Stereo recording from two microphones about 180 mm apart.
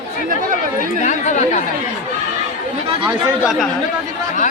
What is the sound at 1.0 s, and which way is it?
Speech, 40° left (ahead or behind).